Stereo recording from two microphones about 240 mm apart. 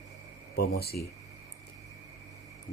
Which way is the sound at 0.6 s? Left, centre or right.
Left.